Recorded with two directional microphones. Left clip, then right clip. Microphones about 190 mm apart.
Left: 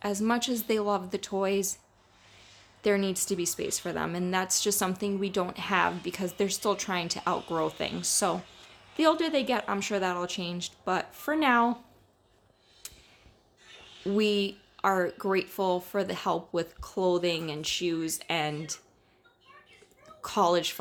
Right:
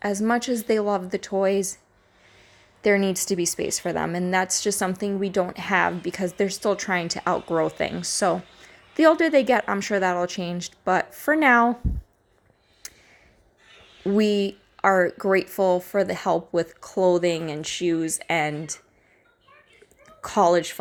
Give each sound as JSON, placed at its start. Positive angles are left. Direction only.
{"t": 0.0, "sound": "speech", "side_deg": -20}
{"t": 2.8, "sound": "speech", "side_deg": -25}
{"t": 12.8, "sound": "a sound", "side_deg": -25}
{"t": 14.1, "sound": "speech", "side_deg": -25}
{"t": 20.2, "sound": "speech", "side_deg": -25}